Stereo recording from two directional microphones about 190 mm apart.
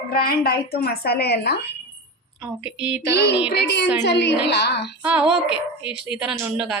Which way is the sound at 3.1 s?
60° left (ahead or behind).